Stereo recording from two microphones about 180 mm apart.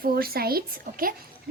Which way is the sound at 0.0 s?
55° right (ahead or behind).